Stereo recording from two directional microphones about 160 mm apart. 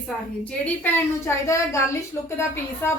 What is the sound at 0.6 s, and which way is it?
A woman's voice, 10° left (ahead or behind).